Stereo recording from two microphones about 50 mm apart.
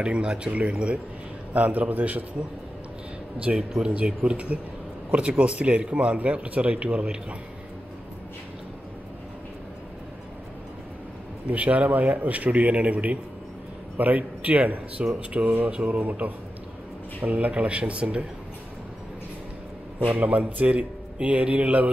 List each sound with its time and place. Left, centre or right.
0.0 s a man's voice: right
3.3 s a man's voice: right
11.5 s a man's voice: right
20.2 s a man's voice: right